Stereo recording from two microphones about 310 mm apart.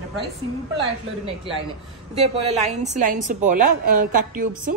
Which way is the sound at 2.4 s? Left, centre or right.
Right.